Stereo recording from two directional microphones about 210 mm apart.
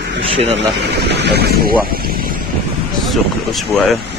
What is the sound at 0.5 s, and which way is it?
Speech, 55° right (ahead or behind).